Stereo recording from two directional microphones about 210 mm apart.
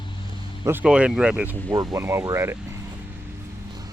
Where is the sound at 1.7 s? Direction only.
15° right (ahead or behind).